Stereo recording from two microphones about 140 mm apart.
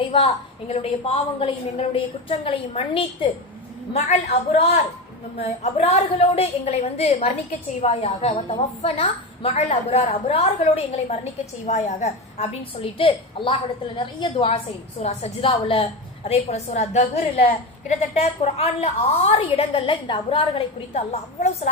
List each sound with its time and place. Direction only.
0.7 s a woman's voice: 45° left (ahead or behind)
3.9 s a woman's voice: 55° left (ahead or behind)